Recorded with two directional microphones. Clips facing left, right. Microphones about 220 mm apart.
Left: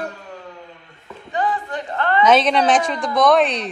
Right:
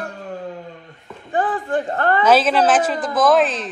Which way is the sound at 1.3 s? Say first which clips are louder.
Right 3 dB; 50° right (ahead or behind).